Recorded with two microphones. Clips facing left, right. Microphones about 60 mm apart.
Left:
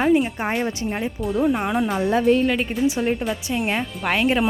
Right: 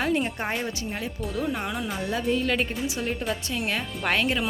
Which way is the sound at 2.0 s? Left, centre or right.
Left.